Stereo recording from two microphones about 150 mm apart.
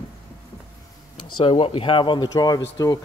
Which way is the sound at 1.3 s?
35° left (ahead or behind).